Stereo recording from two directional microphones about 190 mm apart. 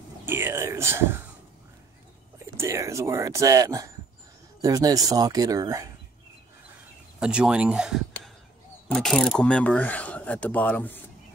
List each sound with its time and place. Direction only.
0.2 s speech: 10° right (ahead or behind)
2.3 s speech: 15° right (ahead or behind)
7.2 s speech: 5° right (ahead or behind)